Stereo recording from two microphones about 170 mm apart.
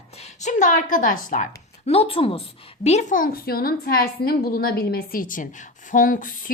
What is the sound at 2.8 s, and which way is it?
A woman's voice, 45° left (ahead or behind).